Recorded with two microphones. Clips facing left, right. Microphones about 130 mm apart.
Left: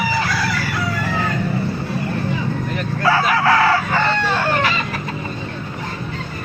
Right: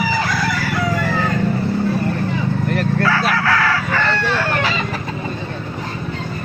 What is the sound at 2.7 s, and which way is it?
Bow-wow, 65° right (ahead or behind).